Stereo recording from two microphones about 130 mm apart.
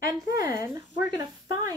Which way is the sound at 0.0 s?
30° right (ahead or behind).